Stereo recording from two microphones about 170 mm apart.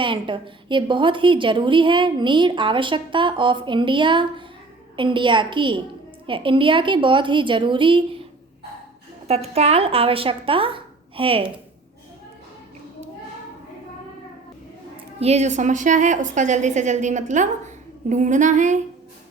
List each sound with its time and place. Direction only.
0.0 s a woman's voice: 30° right (ahead or behind)
9.2 s speech: 40° right (ahead or behind)
15.2 s a woman's voice: 40° right (ahead or behind)